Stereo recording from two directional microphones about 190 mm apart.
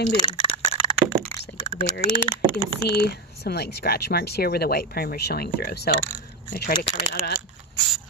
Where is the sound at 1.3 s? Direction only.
15° left (ahead or behind).